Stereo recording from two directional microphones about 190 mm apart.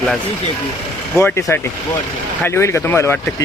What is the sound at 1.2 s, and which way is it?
Speech, 15° left (ahead or behind).